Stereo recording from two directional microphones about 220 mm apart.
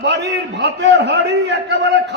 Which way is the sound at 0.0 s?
50° right (ahead or behind).